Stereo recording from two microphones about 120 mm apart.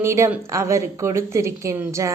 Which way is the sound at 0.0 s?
20° right (ahead or behind).